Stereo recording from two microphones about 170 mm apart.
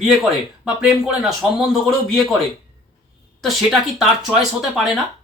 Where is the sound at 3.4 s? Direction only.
Centre (ahead or behind).